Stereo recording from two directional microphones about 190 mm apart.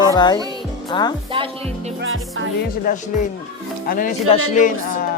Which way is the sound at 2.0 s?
90° right.